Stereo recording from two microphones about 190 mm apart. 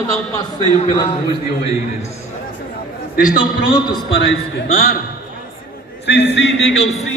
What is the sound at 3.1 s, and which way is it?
Speech, 45° left (ahead or behind).